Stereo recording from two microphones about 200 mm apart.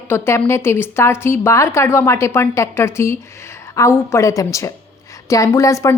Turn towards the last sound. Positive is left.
turn(degrees=15)  # may be behind; listen again after turning